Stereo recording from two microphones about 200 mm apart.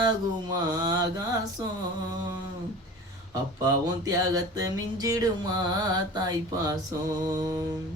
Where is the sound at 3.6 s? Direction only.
15° right (ahead or behind).